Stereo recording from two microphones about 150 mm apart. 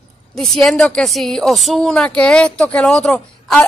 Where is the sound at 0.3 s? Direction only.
5° left (ahead or behind).